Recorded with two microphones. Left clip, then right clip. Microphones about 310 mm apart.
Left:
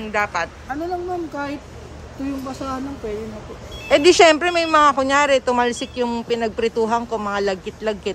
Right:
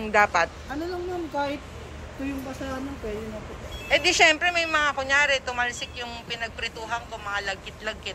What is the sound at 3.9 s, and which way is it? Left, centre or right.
Speech, left.